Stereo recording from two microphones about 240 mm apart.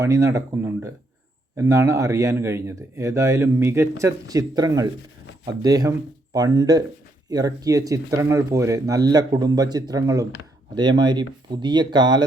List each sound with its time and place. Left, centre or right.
0.0 s speech: centre